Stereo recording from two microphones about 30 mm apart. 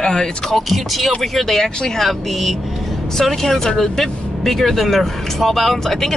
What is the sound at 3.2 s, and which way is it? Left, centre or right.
Speech, centre.